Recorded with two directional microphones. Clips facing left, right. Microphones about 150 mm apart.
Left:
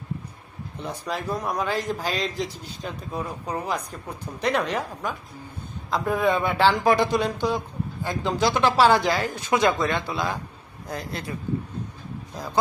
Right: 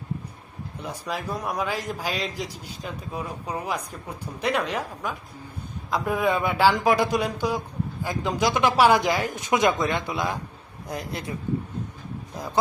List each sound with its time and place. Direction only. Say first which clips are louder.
0.8 s a woman's voice: left 1 dB; 5° right (ahead or behind)